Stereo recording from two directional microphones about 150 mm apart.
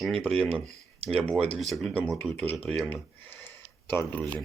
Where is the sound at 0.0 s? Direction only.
Centre (ahead or behind).